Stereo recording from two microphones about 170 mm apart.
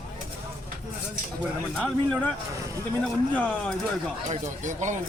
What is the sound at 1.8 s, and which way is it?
Speech, centre (ahead or behind).